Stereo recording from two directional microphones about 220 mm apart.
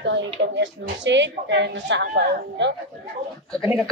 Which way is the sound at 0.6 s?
55° right (ahead or behind).